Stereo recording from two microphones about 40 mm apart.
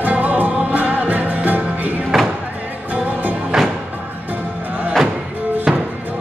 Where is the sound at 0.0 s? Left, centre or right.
Right.